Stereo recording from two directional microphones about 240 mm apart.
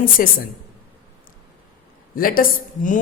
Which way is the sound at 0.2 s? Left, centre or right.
Left.